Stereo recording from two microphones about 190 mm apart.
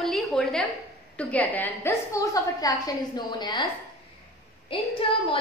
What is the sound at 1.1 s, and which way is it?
A woman's voice, 10° left (ahead or behind).